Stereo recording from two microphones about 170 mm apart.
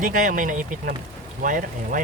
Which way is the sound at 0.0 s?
50° right (ahead or behind).